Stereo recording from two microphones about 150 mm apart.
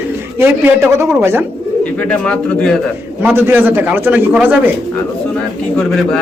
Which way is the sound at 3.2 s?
15° right (ahead or behind).